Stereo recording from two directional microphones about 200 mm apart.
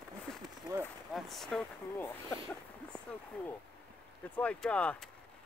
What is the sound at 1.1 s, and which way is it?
Speech, centre (ahead or behind).